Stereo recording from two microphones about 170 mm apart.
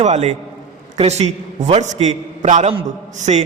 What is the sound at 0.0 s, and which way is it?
A man's voice, 40° right (ahead or behind).